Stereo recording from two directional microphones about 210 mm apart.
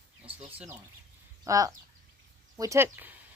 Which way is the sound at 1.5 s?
15° right (ahead or behind).